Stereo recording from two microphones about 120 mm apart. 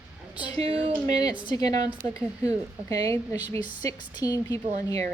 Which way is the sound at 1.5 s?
30° left (ahead or behind).